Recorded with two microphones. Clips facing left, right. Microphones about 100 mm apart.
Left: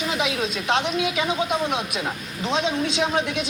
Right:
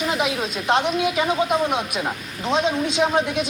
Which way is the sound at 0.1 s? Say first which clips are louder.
Right 1 dB; 45° right (ahead or behind).